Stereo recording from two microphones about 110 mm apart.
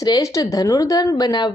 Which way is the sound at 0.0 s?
30° left (ahead or behind).